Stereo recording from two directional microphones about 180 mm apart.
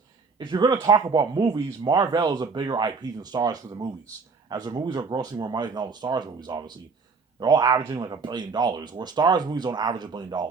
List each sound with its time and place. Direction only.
0.3 s speech: 25° right (ahead or behind)